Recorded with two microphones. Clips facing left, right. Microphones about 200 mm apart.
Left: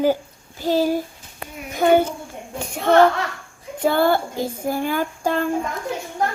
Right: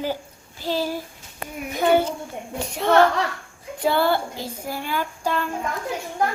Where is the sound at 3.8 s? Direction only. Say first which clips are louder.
Left 3 dB; 50° left (ahead or behind).